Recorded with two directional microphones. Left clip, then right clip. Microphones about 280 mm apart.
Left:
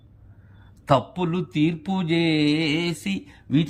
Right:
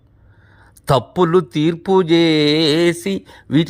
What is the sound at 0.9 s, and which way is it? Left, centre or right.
Mantra, centre.